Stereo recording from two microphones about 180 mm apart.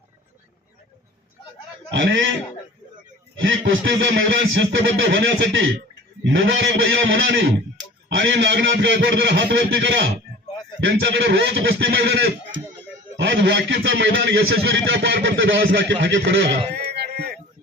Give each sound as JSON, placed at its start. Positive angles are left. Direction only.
{"t": 1.9, "sound": "a man's voice", "side_deg": -80}
{"t": 3.4, "sound": "a man's voice", "side_deg": -85}
{"t": 13.1, "sound": "a man's voice", "side_deg": -80}
{"t": 16.7, "sound": "a sound", "side_deg": -65}